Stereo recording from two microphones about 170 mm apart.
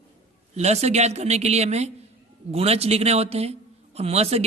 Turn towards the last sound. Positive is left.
turn(degrees=-35)  # may be behind; listen again after turning